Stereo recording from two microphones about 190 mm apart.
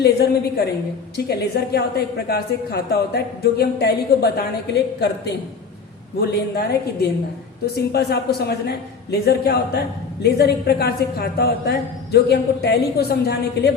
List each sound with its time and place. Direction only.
0.0 s a woman's voice: 55° left (ahead or behind)
7.9 s a woman's voice: 60° left (ahead or behind)